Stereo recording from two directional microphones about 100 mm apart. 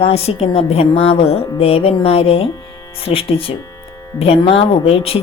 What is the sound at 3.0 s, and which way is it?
A woman's voice, 65° left (ahead or behind).